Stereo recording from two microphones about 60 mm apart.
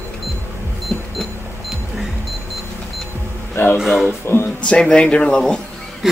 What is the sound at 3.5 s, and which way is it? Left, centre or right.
Speech, left.